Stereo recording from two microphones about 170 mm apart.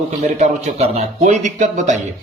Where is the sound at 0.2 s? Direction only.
40° right (ahead or behind).